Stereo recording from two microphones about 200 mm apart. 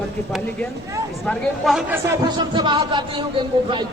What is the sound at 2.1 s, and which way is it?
Speech, 20° right (ahead or behind).